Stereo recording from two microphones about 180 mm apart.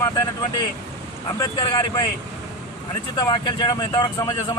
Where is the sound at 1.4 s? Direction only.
25° left (ahead or behind).